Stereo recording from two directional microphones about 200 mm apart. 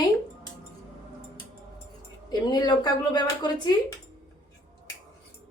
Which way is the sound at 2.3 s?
20° left (ahead or behind).